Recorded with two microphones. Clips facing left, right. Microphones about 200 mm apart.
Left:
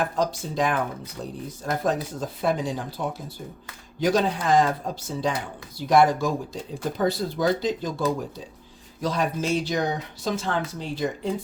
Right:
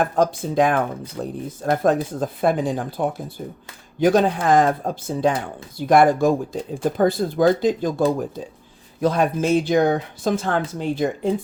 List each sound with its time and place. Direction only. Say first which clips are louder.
0.0 s speech: right 6 dB; 55° right (ahead or behind)